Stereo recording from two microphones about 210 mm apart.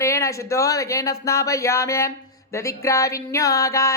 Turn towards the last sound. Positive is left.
turn(degrees=15)  # may be behind; listen again after turning